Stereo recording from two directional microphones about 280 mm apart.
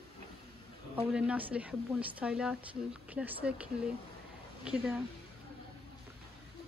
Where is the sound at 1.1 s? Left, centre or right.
Centre.